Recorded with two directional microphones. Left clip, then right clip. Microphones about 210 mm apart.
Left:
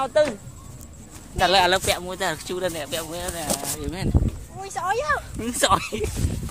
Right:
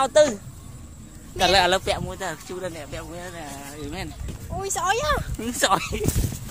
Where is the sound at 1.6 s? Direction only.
5° left (ahead or behind).